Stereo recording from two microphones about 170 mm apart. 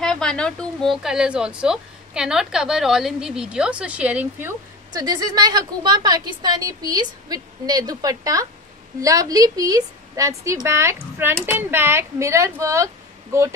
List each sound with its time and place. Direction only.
0.0 s a woman's voice: 5° left (ahead or behind); by 13.6 s 15° right (ahead or behind)